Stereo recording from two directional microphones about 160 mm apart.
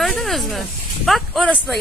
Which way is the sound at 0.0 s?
Centre (ahead or behind).